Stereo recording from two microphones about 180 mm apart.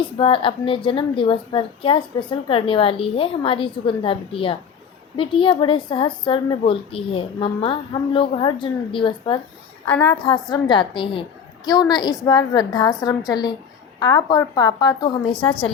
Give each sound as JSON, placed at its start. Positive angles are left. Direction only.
{"t": 0.0, "sound": "a woman's voice", "side_deg": 30}
{"t": 9.8, "sound": "a woman's voice", "side_deg": 10}
{"t": 10.2, "sound": "a woman's voice", "side_deg": 25}